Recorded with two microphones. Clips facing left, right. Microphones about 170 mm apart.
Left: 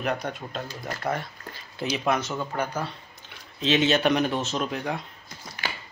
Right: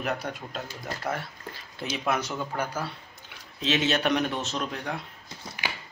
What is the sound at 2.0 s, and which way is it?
Speech, 10° right (ahead or behind).